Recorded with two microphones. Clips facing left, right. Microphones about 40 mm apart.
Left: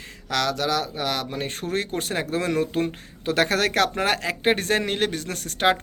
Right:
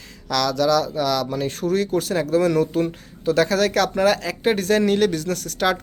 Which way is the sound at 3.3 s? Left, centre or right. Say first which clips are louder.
Right 3 dB; left.